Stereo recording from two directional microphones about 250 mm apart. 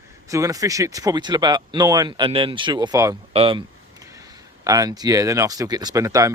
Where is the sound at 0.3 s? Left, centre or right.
Centre.